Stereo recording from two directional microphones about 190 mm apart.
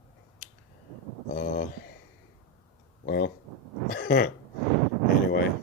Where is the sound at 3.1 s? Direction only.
60° left (ahead or behind).